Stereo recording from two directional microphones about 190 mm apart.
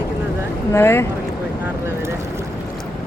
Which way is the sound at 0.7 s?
15° left (ahead or behind).